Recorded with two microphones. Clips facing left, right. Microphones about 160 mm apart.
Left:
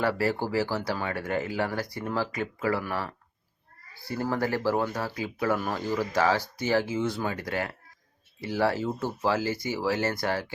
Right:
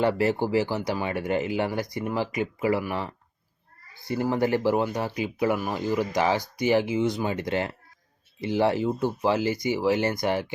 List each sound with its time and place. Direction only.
0.0 s speech: 20° right (ahead or behind)